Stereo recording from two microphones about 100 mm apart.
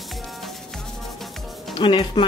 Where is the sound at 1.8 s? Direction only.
50° left (ahead or behind).